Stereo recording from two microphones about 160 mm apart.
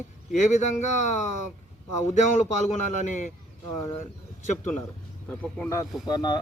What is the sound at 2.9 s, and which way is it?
Speech, 50° left (ahead or behind).